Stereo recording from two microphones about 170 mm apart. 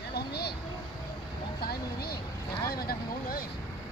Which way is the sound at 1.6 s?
65° left (ahead or behind).